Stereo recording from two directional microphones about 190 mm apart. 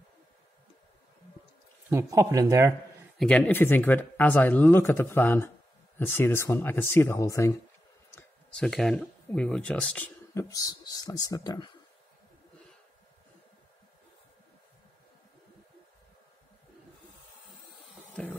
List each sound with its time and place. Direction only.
1.9 s speech: 15° right (ahead or behind)
3.2 s speech: 5° left (ahead or behind)
8.1 s a sound: 15° left (ahead or behind)
8.6 s speech: centre (ahead or behind)
10.3 s speech: 20° left (ahead or behind)
18.2 s music: 5° left (ahead or behind)